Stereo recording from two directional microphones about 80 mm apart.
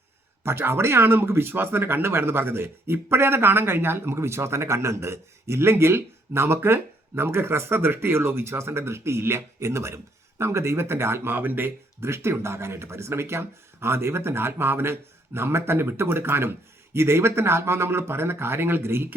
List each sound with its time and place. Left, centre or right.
0.4 s speech: right